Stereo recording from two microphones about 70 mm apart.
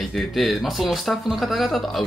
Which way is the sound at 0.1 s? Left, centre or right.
Centre.